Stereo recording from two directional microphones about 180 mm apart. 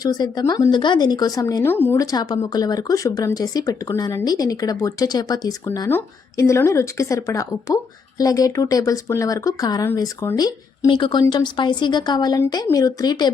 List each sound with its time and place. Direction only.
0.0 s speech: 20° left (ahead or behind)